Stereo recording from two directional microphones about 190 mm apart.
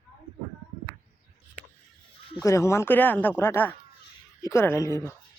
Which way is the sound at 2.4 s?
15° left (ahead or behind).